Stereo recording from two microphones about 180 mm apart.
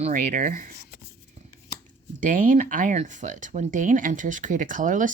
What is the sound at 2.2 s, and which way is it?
Speech, 45° right (ahead or behind).